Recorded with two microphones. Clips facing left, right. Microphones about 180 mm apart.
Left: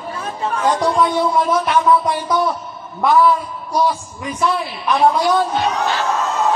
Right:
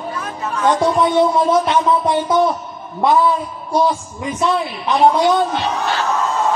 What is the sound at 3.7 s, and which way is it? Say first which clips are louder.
A woman's voice: right 2 dB; 25° right (ahead or behind).